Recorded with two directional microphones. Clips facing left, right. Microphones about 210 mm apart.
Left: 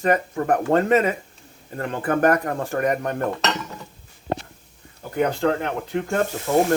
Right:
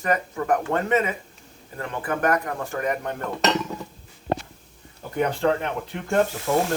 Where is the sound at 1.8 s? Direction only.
50° left (ahead or behind).